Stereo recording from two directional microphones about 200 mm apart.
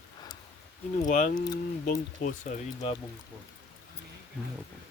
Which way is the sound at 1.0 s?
40° left (ahead or behind).